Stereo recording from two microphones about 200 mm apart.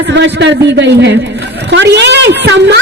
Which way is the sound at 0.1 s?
65° right (ahead or behind).